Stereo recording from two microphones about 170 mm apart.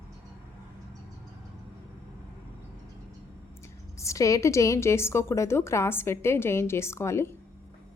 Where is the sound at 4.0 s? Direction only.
20° left (ahead or behind).